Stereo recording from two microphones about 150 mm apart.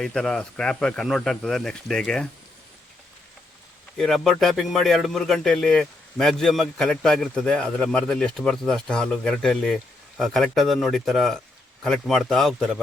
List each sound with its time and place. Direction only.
0.0 s speech: 5° left (ahead or behind)
3.9 s speech: centre (ahead or behind)